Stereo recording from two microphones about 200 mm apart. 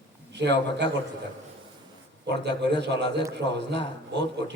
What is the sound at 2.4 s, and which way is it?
A man's voice, 60° right (ahead or behind).